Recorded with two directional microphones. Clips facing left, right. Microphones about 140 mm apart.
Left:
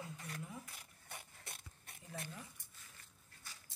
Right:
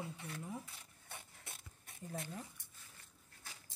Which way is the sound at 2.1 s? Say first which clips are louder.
Right 3 dB; 25° right (ahead or behind).